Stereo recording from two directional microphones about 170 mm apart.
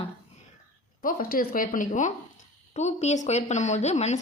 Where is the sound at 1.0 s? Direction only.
60° left (ahead or behind).